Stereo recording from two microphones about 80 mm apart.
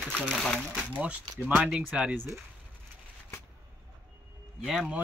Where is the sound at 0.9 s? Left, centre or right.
Centre.